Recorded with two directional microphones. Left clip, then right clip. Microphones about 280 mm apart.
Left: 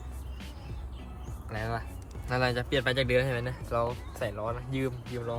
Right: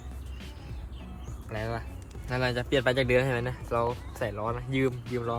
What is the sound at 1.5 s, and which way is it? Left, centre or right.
Speech, centre.